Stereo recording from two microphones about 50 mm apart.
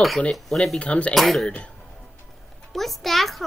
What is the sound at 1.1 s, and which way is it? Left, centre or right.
Speech, centre.